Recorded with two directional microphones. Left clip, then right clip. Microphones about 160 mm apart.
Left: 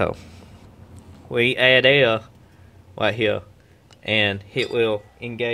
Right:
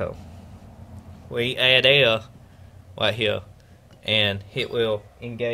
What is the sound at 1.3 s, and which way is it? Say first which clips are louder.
Speech: left 3 dB; 35° left (ahead or behind).